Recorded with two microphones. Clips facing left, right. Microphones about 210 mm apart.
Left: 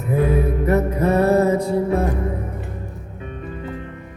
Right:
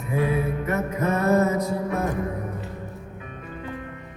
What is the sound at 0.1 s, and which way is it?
Music, 40° left (ahead or behind).